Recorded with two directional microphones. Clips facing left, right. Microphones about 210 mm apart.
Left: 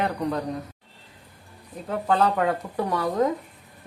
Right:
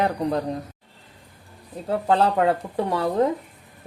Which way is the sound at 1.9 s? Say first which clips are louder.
Right 2 dB; 30° right (ahead or behind).